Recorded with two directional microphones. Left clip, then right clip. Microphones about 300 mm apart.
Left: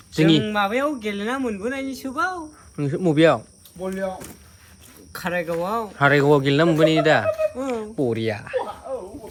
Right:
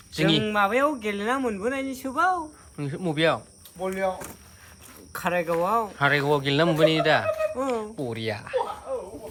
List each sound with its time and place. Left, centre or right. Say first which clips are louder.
0.1 s speech: left 4 dB; centre
3.8 s speech: right 1 dB; centre
5.1 s speech: even; centre